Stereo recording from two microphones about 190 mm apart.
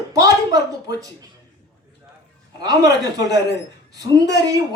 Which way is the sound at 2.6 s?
20° right (ahead or behind).